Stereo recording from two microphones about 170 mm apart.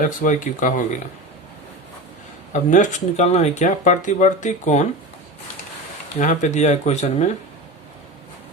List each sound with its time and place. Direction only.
0.0 s speech: 50° left (ahead or behind)
2.5 s speech: 45° left (ahead or behind)
6.1 s speech: 45° left (ahead or behind)